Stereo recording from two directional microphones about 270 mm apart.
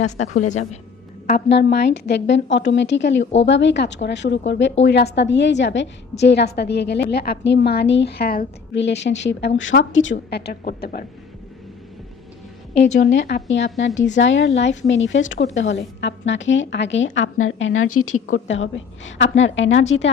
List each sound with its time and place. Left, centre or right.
0.0 s a woman's voice: left
1.3 s a woman's voice: left
12.7 s a woman's voice: left
13.1 s a woman's voice: left